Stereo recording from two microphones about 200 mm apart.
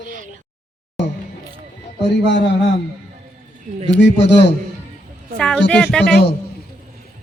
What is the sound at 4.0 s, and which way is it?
Mantra, 60° left (ahead or behind).